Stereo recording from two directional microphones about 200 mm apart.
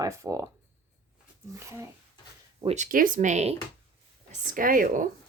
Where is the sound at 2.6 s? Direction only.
35° right (ahead or behind).